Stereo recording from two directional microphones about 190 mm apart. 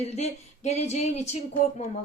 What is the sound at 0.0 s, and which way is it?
Speech, 35° left (ahead or behind).